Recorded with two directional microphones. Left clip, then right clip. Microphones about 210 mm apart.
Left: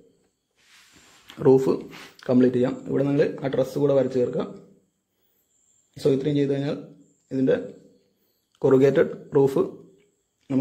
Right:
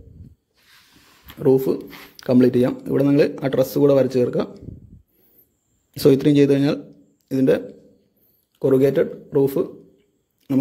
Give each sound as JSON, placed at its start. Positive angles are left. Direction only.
{"t": 1.2, "sound": "speech", "side_deg": -15}
{"t": 1.9, "sound": "speech", "side_deg": -30}
{"t": 5.9, "sound": "speech", "side_deg": -40}
{"t": 8.5, "sound": "speech", "side_deg": -15}